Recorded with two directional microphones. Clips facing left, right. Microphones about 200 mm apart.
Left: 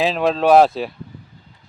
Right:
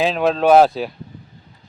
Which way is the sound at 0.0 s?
Centre (ahead or behind).